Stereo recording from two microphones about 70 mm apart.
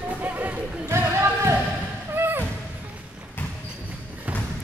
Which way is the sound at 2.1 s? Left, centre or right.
Right.